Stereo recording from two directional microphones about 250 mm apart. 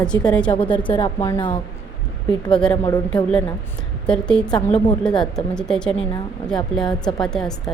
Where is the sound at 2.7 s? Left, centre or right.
Centre.